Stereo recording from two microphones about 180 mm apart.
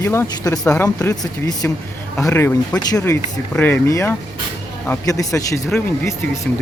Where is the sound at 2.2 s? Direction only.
15° left (ahead or behind).